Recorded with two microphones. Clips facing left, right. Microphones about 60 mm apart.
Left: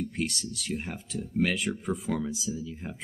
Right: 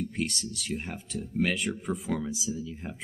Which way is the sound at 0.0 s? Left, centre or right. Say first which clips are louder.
Even; centre.